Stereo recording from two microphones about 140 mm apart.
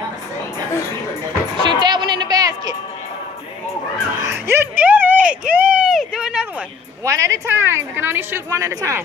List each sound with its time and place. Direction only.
1.6 s music: 30° right (ahead or behind)
4.3 s a sound: 15° right (ahead or behind)
7.1 s a woman's voice: 20° right (ahead or behind)